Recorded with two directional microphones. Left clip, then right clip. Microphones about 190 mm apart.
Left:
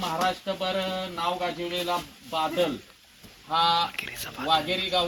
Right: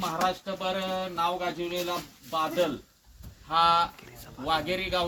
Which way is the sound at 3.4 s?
15° left (ahead or behind).